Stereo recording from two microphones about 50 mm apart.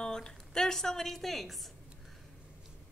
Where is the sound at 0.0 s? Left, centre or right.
Centre.